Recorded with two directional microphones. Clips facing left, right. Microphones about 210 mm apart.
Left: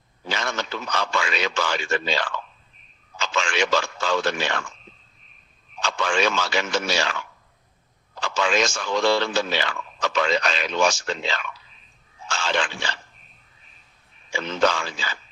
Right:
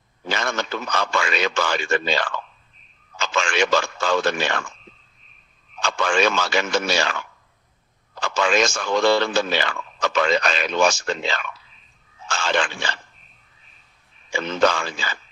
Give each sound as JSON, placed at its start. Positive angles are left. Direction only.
{"t": 0.3, "sound": "speech", "side_deg": -50}
{"t": 5.8, "sound": "speech", "side_deg": -50}
{"t": 14.3, "sound": "speech", "side_deg": -50}